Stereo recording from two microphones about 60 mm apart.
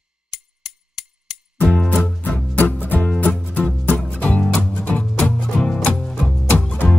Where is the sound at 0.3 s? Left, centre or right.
Centre.